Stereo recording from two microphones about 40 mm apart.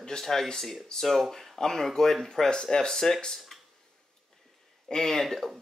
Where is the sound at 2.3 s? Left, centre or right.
Centre.